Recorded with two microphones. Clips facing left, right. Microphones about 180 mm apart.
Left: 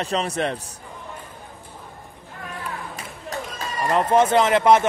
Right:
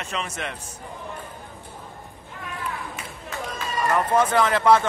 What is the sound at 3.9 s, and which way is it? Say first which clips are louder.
Speech: left 4 dB; 25° left (ahead or behind).